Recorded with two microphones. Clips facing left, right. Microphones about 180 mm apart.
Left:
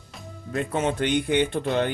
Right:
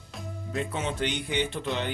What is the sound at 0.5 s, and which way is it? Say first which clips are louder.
Speech: left 6 dB; 50° left (ahead or behind).